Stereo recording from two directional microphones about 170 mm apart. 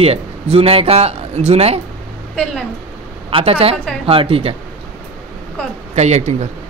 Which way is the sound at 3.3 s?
35° right (ahead or behind).